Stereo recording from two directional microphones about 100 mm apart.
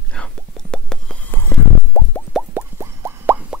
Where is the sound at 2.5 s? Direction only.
25° right (ahead or behind).